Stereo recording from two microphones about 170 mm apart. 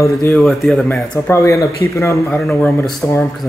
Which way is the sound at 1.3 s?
20° left (ahead or behind).